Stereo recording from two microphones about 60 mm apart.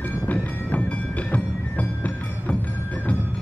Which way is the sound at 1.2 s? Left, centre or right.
Left.